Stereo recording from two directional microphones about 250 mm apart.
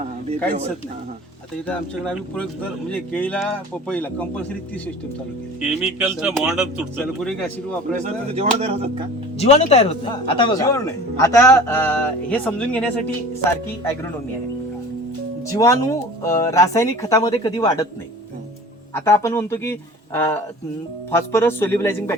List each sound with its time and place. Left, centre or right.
1.6 s speech: centre
5.5 s speech: centre
8.0 s speech: right
9.4 s speech: left; by 12.9 s centre
15.5 s speech: centre
18.9 s speech: centre